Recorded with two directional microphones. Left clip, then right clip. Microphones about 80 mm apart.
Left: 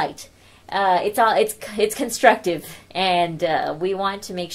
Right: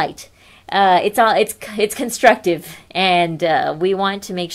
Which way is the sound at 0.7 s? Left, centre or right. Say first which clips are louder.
Right 5 dB; right.